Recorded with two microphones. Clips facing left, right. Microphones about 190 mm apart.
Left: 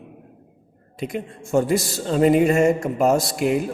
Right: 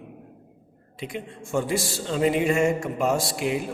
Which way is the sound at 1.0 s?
45° left (ahead or behind).